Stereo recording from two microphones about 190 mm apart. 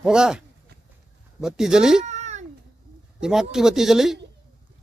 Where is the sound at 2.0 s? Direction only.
35° right (ahead or behind).